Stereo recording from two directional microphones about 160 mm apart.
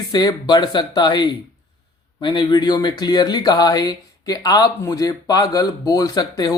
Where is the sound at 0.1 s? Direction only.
25° left (ahead or behind).